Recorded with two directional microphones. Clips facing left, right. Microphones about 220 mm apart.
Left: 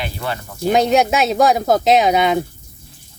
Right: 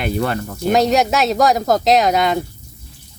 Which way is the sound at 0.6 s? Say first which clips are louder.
Left 1 dB; centre (ahead or behind).